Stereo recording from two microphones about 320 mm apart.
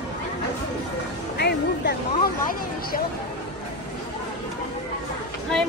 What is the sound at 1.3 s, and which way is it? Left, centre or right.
Music, left.